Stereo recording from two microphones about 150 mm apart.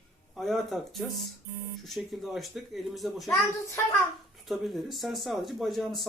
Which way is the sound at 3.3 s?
20° left (ahead or behind).